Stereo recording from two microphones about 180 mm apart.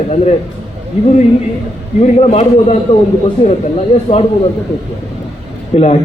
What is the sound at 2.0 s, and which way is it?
Speech, 35° left (ahead or behind).